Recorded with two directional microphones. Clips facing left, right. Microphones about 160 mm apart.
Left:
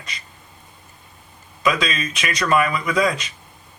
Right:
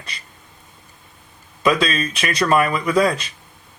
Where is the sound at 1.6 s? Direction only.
35° right (ahead or behind).